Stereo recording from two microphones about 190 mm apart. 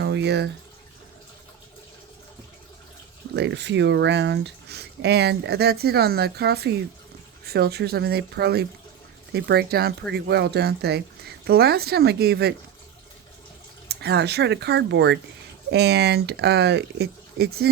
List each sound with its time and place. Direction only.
0.0 s bathtub: 65° right (ahead or behind)
3.3 s speech: 65° right (ahead or behind)
13.8 s speech: 60° right (ahead or behind)